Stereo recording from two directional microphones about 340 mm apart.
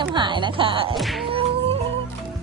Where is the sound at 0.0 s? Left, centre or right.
Centre.